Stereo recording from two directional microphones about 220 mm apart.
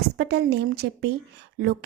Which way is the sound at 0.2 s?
50° right (ahead or behind).